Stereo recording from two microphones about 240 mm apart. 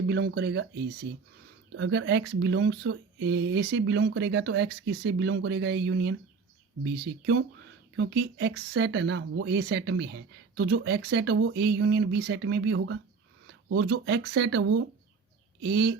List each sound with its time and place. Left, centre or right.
0.1 s speech: right